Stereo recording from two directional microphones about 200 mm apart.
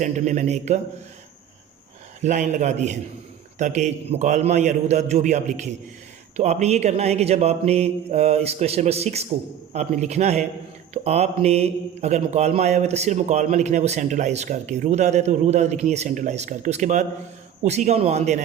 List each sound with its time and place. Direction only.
0.0 s speech: 35° right (ahead or behind)
2.2 s speech: 35° right (ahead or behind)